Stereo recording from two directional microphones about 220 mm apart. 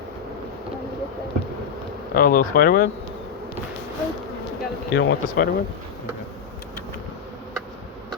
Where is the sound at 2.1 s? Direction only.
40° left (ahead or behind).